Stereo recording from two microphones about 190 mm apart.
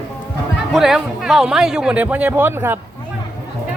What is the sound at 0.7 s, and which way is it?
A man's voice, centre (ahead or behind).